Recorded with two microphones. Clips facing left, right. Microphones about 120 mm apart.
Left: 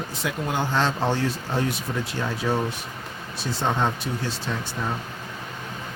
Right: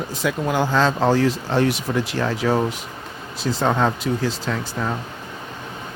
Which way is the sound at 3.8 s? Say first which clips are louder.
Right 5 dB; 90° right.